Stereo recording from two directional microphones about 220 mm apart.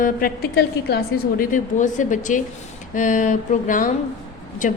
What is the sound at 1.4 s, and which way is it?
A woman's voice, 35° left (ahead or behind).